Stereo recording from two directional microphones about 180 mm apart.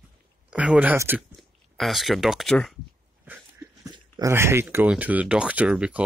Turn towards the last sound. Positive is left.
turn(degrees=-5)  # may be behind; listen again after turning